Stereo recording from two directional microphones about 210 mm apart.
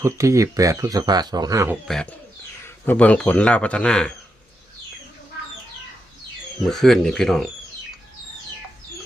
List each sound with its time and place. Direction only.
0.0 s speech: 15° right (ahead or behind)
1.9 s speech: 5° left (ahead or behind)
6.7 s speech: centre (ahead or behind)